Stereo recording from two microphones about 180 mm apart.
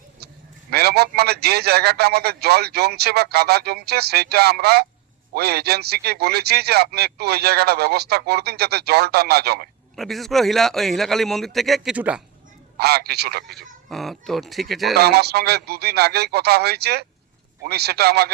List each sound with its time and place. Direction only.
0.7 s a man's voice: 60° right (ahead or behind)
9.9 s a man's voice: centre (ahead or behind)
12.7 s a man's voice: 60° right (ahead or behind)
13.9 s a man's voice: centre (ahead or behind)
14.9 s a man's voice: 65° right (ahead or behind)